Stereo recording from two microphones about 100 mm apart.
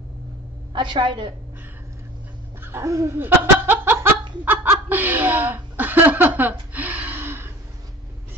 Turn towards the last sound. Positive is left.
turn(degrees=-20)  # may be behind; listen again after turning